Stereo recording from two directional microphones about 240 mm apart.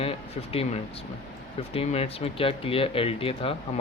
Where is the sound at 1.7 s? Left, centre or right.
Left.